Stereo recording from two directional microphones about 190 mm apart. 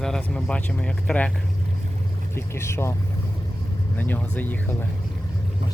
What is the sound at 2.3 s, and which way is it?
Speech, 15° left (ahead or behind).